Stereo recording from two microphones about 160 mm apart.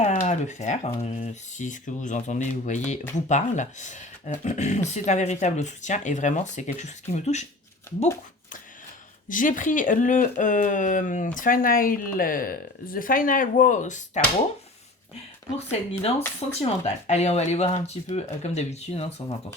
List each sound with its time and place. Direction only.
0.0 s speech: 45° left (ahead or behind)
9.3 s speech: 55° left (ahead or behind)
15.5 s speech: 40° left (ahead or behind)